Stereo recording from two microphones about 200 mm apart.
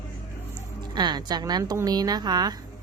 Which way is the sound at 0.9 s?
20° right (ahead or behind).